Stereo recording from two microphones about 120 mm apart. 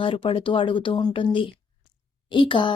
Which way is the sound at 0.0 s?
45° left (ahead or behind).